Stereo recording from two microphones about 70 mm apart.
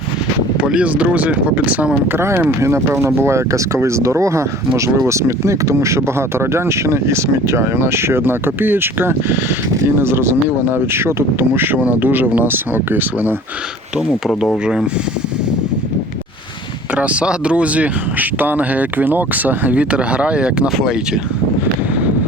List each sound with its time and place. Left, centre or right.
0.6 s speech: centre
2.1 s speech: right
14.3 s speech: centre
16.9 s speech: right